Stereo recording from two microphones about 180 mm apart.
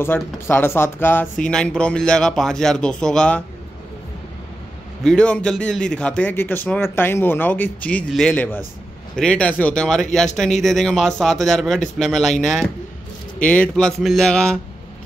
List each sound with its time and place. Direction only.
0.0 s speech: 10° left (ahead or behind)
5.0 s a man's voice: 5° left (ahead or behind)
13.4 s speech: 5° left (ahead or behind)